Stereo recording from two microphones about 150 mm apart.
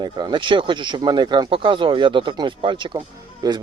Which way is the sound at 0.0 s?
30° right (ahead or behind).